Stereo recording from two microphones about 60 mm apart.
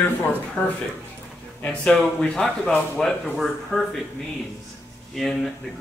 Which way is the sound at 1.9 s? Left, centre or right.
Centre.